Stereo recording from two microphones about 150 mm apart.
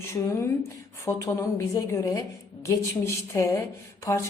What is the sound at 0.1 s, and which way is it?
A woman's voice, 20° left (ahead or behind).